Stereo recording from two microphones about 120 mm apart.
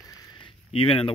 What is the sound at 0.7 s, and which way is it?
Speech, 50° left (ahead or behind).